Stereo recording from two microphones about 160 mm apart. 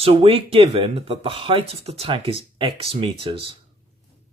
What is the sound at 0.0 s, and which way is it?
Speech, 35° right (ahead or behind).